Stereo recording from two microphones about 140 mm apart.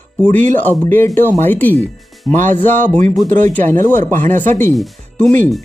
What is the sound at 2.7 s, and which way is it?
Speech, 60° right (ahead or behind).